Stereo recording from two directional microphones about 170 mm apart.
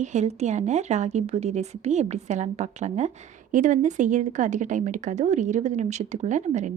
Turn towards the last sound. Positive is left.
turn(degrees=-45)  # may be behind; listen again after turning